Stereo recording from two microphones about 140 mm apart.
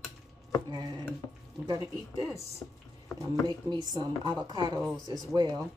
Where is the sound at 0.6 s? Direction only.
30° right (ahead or behind).